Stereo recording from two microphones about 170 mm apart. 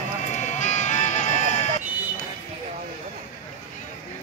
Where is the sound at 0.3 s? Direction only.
45° left (ahead or behind).